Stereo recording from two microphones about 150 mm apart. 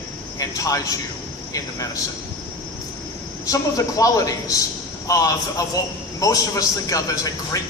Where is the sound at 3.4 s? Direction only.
20° left (ahead or behind).